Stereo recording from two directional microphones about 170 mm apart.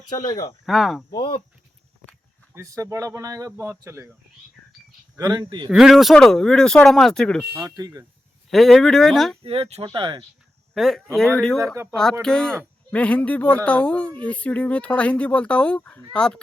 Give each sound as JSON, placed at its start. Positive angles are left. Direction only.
{"t": 0.1, "sound": "speech", "side_deg": 25}
{"t": 0.6, "sound": "speech", "side_deg": 0}
{"t": 1.1, "sound": "speech", "side_deg": 30}
{"t": 2.6, "sound": "speech", "side_deg": -20}
{"t": 5.1, "sound": "speech", "side_deg": -20}
{"t": 5.7, "sound": "speech", "side_deg": 0}
{"t": 7.8, "sound": "speech", "side_deg": -20}
{"t": 8.4, "sound": "speech", "side_deg": 0}
{"t": 9.4, "sound": "speech", "side_deg": -35}
{"t": 10.8, "sound": "speech", "side_deg": 0}
{"t": 11.6, "sound": "speech", "side_deg": -15}
{"t": 12.2, "sound": "speech", "side_deg": 5}